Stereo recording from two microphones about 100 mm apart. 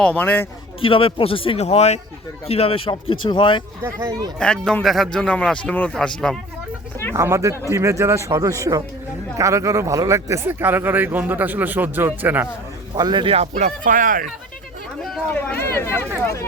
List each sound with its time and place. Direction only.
0.0 s speech: 15° left (ahead or behind)
0.8 s a man's voice: 65° left (ahead or behind)
3.8 s speech: 30° right (ahead or behind)
4.4 s speech: 10° left (ahead or behind)
7.2 s speech: 30° right (ahead or behind)
12.9 s a man's voice: 50° right (ahead or behind)
13.2 s speech: 90° right
15.4 s speech: 25° left (ahead or behind)